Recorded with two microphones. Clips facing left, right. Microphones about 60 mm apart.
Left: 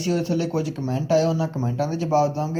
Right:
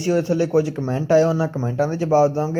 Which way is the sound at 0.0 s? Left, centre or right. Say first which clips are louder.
Right 4 dB; right.